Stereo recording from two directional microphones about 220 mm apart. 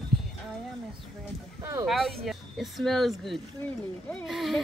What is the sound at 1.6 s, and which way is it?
Speech, 15° right (ahead or behind).